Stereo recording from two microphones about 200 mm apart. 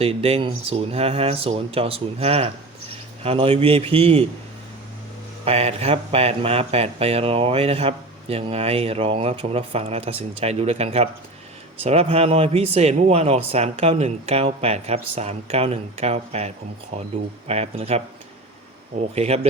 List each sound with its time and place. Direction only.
0.0 s speech: 30° right (ahead or behind)
5.5 s speech: 30° right (ahead or behind)
19.1 s speech: 30° right (ahead or behind)